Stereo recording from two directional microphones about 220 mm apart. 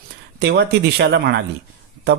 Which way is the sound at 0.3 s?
50° right (ahead or behind).